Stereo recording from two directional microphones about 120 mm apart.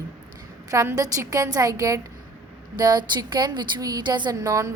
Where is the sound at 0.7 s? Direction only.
25° right (ahead or behind).